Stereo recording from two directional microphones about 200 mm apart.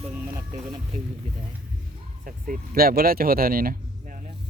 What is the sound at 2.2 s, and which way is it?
Speech, 45° right (ahead or behind).